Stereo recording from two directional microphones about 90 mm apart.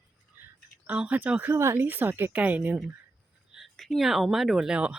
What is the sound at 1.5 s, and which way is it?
Speech, 30° right (ahead or behind).